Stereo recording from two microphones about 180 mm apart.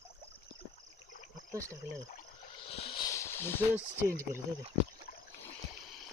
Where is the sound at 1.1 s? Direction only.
45° left (ahead or behind).